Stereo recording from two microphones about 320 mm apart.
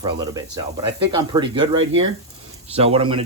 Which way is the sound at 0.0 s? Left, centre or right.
Centre.